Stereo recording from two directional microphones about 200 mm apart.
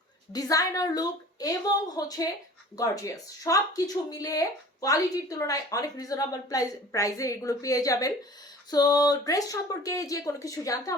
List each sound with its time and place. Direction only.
0.3 s a woman's voice: 20° left (ahead or behind)